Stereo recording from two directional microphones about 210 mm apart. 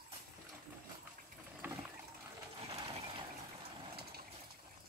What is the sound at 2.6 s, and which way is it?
Ratchet, 25° right (ahead or behind).